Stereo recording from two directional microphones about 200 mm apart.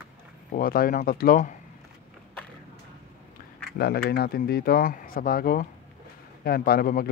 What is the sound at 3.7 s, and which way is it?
Speech, 50° left (ahead or behind).